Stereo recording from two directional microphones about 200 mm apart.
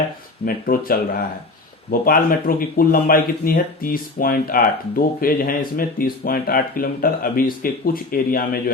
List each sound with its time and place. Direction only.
0.4 s speech: 45° left (ahead or behind)